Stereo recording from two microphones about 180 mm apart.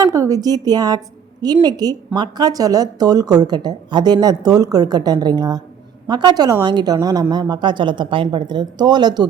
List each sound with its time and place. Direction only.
0.0 s a woman's voice: 20° right (ahead or behind)